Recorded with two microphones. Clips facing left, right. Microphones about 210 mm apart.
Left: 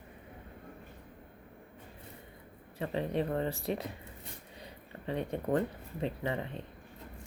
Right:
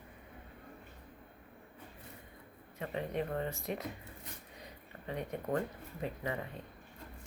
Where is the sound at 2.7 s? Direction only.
30° left (ahead or behind).